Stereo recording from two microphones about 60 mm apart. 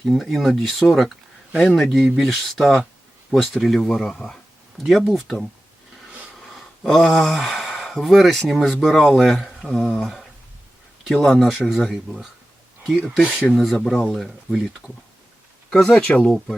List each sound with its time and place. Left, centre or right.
0.0 s speech: centre
6.4 s a sound: centre
8.6 s speech: centre
15.7 s speech: centre
16.2 s speech: centre